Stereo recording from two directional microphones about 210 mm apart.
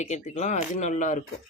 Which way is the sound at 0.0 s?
35° left (ahead or behind).